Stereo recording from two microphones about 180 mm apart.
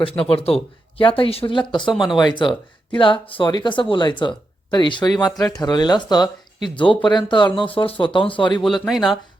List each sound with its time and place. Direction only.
0.0 s speech: 30° left (ahead or behind)
8.6 s speech: centre (ahead or behind)